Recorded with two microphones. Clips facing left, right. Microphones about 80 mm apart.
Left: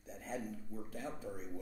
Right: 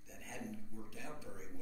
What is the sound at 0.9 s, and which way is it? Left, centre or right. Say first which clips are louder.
Speech: left 7 dB; left.